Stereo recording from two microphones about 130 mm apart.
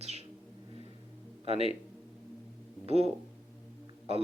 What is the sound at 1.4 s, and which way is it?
Speech, 50° right (ahead or behind).